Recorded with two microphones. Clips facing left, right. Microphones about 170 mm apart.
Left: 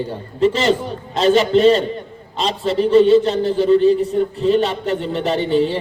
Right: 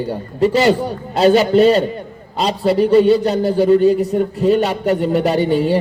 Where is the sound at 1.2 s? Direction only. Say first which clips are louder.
Right 2 dB; 40° right (ahead or behind).